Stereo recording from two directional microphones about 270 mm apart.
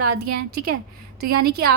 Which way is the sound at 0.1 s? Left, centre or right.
Right.